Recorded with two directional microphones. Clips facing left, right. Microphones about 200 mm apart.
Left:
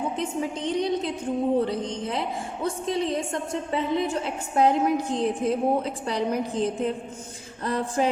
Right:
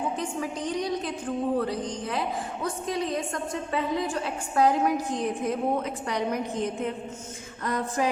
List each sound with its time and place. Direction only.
0.2 s a woman's voice: 25° left (ahead or behind)